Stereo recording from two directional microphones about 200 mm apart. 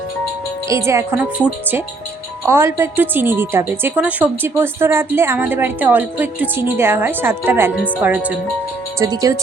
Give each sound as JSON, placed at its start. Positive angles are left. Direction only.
{"t": 0.7, "sound": "a woman's voice", "side_deg": -15}